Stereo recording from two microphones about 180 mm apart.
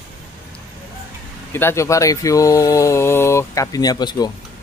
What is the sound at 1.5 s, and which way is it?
Speech, 15° left (ahead or behind).